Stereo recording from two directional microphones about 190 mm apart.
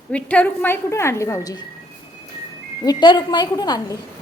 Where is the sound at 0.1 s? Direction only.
5° left (ahead or behind).